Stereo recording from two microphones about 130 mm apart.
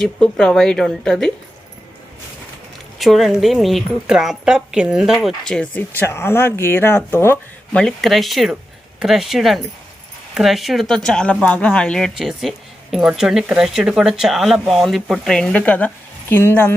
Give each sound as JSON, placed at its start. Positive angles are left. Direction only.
{"t": 0.0, "sound": "speech", "side_deg": 5}
{"t": 3.0, "sound": "speech", "side_deg": 0}
{"t": 7.8, "sound": "speech", "side_deg": 0}